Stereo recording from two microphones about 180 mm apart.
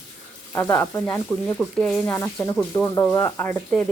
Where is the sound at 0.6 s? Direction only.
10° left (ahead or behind).